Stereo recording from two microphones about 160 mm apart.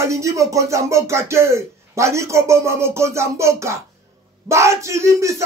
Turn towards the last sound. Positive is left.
turn(degrees=-20)  # may be behind; listen again after turning